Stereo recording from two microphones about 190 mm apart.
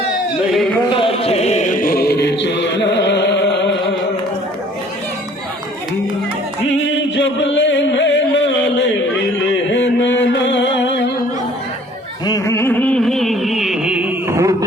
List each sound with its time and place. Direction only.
0.9 s chant: 25° left (ahead or behind); by 3.7 s 70° left (ahead or behind)
6.7 s music: 70° left (ahead or behind)
9.6 s a sound: 70° left (ahead or behind)
12.2 s music: 15° left (ahead or behind); by 14.5 s 15° right (ahead or behind)